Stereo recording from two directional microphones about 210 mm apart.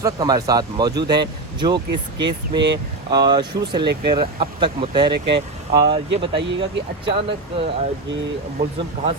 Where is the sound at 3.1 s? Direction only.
20° right (ahead or behind).